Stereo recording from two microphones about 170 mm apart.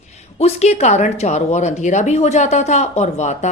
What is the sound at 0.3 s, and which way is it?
A woman's voice, 40° left (ahead or behind).